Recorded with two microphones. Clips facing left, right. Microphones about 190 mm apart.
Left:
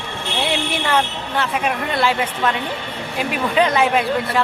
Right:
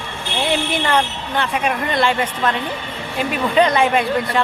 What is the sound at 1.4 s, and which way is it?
A woman's voice, centre (ahead or behind).